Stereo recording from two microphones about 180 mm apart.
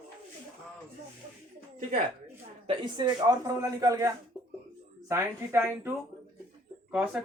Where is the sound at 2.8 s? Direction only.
25° right (ahead or behind).